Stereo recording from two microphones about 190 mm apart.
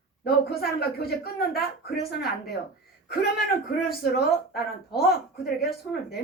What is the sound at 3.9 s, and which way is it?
A woman's voice, 55° left (ahead or behind).